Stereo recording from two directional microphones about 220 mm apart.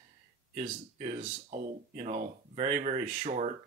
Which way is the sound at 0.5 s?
30° right (ahead or behind).